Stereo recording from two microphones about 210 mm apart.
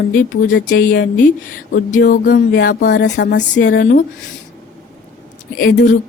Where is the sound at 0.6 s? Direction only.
45° left (ahead or behind).